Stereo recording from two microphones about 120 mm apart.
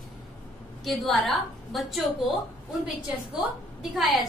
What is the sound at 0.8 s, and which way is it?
A woman's voice, centre (ahead or behind).